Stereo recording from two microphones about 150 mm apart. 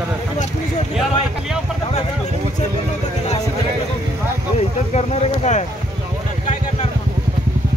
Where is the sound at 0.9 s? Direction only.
Centre (ahead or behind).